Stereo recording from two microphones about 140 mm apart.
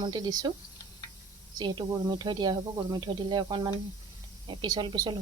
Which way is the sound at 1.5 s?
30° right (ahead or behind).